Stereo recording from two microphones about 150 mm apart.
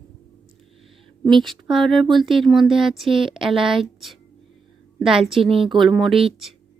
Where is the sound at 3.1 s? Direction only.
35° right (ahead or behind).